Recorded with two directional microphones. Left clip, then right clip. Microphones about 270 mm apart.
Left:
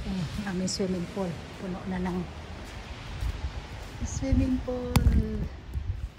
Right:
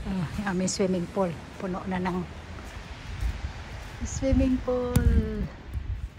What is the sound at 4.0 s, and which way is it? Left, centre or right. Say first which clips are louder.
Speech: right 4 dB; centre.